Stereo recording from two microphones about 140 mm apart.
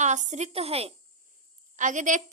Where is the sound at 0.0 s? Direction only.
60° right (ahead or behind).